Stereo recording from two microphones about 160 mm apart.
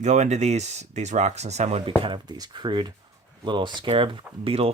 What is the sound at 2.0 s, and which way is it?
Speech, 30° right (ahead or behind).